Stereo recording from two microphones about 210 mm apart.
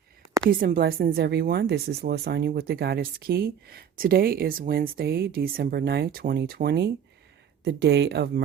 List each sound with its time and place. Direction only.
0.6 s speech: 45° right (ahead or behind)